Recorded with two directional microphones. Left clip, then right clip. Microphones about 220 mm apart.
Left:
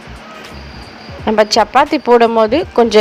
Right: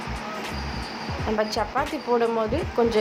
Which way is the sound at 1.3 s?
40° left (ahead or behind).